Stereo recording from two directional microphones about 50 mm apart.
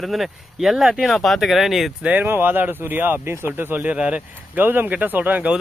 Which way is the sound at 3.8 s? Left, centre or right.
Right.